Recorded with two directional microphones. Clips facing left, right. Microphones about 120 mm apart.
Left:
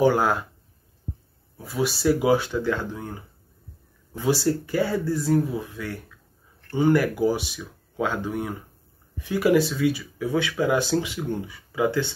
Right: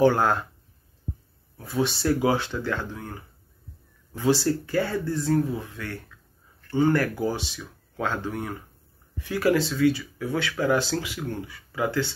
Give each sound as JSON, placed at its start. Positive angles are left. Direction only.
{"t": 0.0, "sound": "speech", "side_deg": 10}
{"t": 1.6, "sound": "speech", "side_deg": 5}
{"t": 4.5, "sound": "speech", "side_deg": 15}